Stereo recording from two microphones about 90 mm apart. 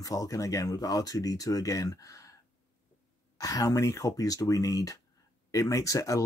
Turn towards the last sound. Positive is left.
turn(degrees=35)  # may be behind; listen again after turning